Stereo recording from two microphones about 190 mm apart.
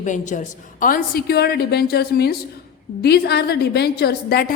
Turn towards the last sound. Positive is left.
turn(degrees=55)  # may be behind; listen again after turning